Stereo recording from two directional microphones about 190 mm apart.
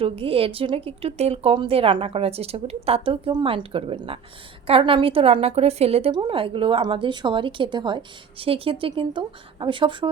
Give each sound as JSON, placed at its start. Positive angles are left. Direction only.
{"t": 0.0, "sound": "a woman's voice", "side_deg": -30}